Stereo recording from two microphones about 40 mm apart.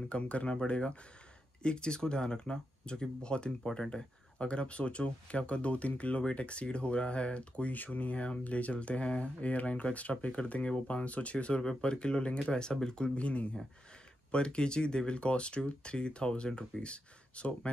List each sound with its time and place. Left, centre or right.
0.1 s speech: left
13.1 s speech: left